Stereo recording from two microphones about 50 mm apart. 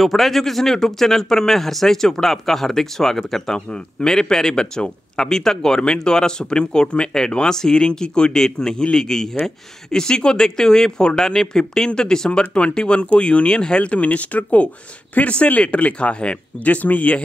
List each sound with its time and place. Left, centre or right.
0.0 s speech: centre; by 17.2 s left